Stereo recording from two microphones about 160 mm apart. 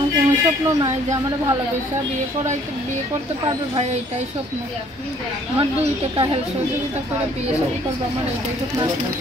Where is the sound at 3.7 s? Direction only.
45° right (ahead or behind).